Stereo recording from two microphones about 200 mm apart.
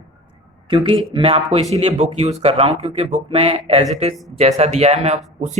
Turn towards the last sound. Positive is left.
turn(degrees=-35)  # may be behind; listen again after turning